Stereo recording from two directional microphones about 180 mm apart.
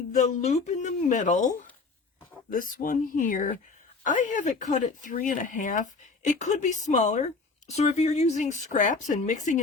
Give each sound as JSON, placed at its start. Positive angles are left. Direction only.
{"t": 0.1, "sound": "speech", "side_deg": 40}